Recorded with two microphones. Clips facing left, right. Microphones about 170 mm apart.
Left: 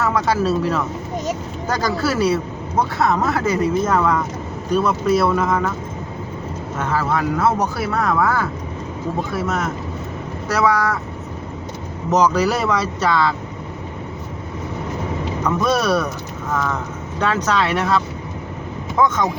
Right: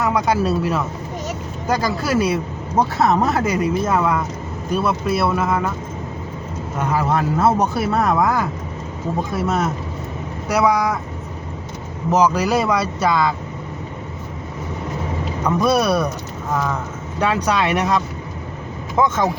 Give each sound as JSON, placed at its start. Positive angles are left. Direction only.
{"t": 0.0, "sound": "speech", "side_deg": -10}
{"t": 3.4, "sound": "speech", "side_deg": -10}
{"t": 6.7, "sound": "speech", "side_deg": -15}
{"t": 10.5, "sound": "speech", "side_deg": -15}
{"t": 12.1, "sound": "speech", "side_deg": -10}
{"t": 15.4, "sound": "speech", "side_deg": -10}